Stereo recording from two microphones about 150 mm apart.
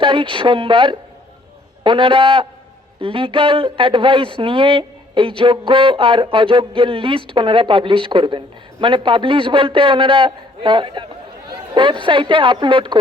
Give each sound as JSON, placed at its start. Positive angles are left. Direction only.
{"t": 0.0, "sound": "speech", "side_deg": -35}